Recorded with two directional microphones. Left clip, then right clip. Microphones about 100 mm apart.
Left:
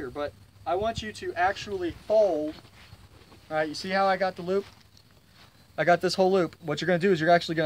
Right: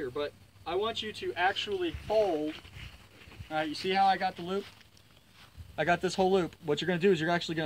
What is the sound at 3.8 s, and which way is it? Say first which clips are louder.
Speech: left 1 dB; 35° left (ahead or behind).